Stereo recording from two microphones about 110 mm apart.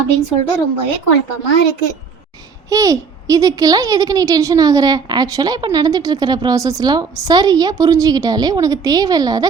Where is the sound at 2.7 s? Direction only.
30° right (ahead or behind).